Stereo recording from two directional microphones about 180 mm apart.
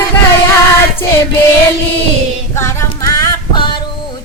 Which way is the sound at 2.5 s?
15° left (ahead or behind).